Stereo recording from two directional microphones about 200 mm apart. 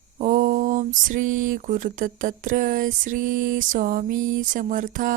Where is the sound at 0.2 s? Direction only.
40° right (ahead or behind).